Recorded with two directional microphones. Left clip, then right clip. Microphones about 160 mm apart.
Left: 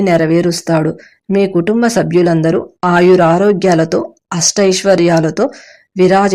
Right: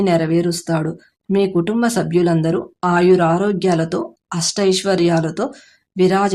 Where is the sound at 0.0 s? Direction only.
30° left (ahead or behind).